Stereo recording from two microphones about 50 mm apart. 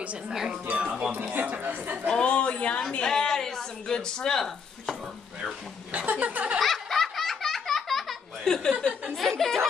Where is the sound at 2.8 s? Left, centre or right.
Centre.